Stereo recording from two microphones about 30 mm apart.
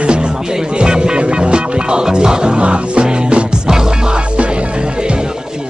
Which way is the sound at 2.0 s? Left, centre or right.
Right.